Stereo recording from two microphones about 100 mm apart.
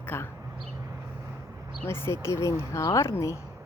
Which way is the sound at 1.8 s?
25° left (ahead or behind).